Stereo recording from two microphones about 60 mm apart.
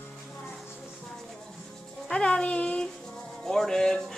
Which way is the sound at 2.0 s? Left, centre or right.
Centre.